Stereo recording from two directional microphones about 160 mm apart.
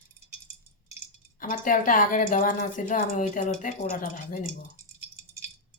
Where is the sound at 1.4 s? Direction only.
60° left (ahead or behind).